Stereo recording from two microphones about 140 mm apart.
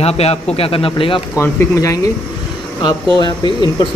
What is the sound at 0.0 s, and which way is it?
Speech, 45° left (ahead or behind).